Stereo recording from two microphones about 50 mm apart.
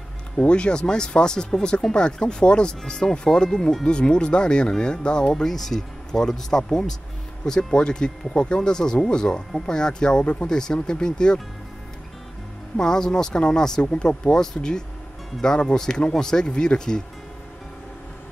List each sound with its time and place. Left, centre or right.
0.4 s speech: left
5.3 s speech: centre
12.7 s speech: centre